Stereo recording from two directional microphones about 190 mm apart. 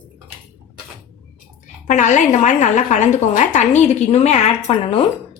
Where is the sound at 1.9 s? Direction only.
40° left (ahead or behind).